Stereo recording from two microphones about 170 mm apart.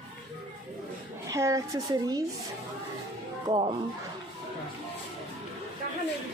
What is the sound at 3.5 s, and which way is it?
Speech, 30° right (ahead or behind).